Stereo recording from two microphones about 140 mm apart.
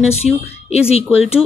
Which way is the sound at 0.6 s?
50° left (ahead or behind).